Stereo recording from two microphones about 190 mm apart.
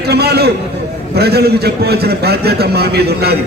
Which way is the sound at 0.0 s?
55° right (ahead or behind).